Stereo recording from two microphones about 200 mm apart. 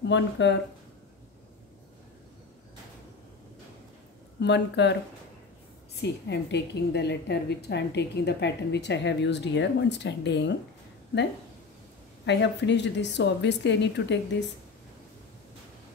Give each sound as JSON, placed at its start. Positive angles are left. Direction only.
{"t": 0.0, "sound": "a woman's voice", "side_deg": 65}
{"t": 4.4, "sound": "a woman's voice", "side_deg": 60}
{"t": 6.0, "sound": "a woman's voice", "side_deg": 60}
{"t": 12.3, "sound": "a woman's voice", "side_deg": 60}